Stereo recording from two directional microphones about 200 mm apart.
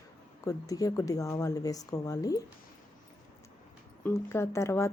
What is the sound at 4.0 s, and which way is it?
Speech, 10° left (ahead or behind).